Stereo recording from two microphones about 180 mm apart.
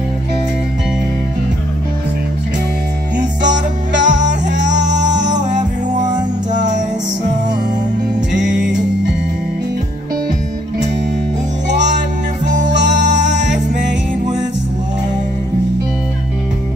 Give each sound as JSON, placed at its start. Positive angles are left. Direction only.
{"t": 3.2, "sound": "music", "side_deg": -45}
{"t": 12.8, "sound": "music", "side_deg": -40}